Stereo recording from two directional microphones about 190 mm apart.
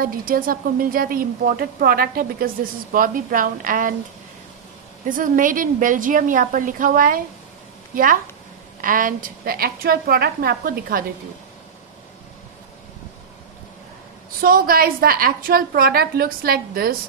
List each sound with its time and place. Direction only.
0.0 s a woman's voice: 50° right (ahead or behind)
5.0 s a woman's voice: 45° right (ahead or behind)
14.4 s a woman's voice: 50° right (ahead or behind)